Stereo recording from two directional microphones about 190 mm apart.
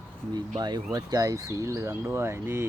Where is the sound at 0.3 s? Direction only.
25° right (ahead or behind).